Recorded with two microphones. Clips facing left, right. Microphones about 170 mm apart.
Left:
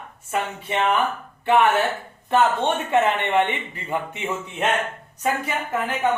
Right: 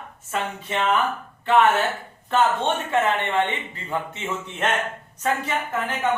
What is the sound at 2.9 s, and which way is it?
Speech, 20° left (ahead or behind).